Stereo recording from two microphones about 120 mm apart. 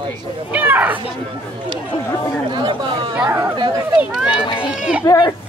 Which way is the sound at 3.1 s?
10° right (ahead or behind).